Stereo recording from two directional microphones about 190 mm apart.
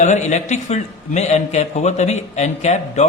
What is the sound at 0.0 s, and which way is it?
A man's voice, 40° left (ahead or behind).